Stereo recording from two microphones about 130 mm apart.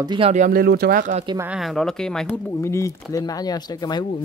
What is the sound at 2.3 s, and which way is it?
Speech, 20° left (ahead or behind).